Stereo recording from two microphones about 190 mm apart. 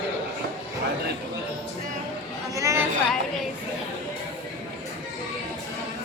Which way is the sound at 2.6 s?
15° right (ahead or behind).